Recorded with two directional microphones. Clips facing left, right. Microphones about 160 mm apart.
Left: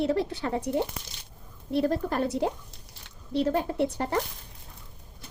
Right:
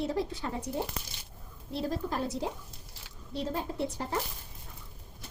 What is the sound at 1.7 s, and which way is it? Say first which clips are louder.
A woman's voice: left 7 dB; 60° left (ahead or behind).